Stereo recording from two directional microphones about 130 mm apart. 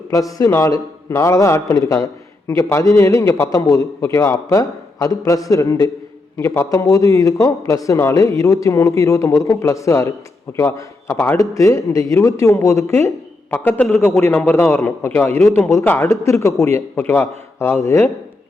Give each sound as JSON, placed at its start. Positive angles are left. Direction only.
{"t": 0.1, "sound": "a man's voice", "side_deg": 25}
{"t": 16.7, "sound": "a man's voice", "side_deg": 15}